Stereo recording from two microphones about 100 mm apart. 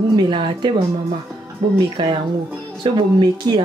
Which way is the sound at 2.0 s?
50° right (ahead or behind).